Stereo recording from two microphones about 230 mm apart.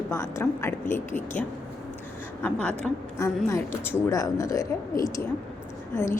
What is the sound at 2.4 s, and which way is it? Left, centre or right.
A woman's voice, centre.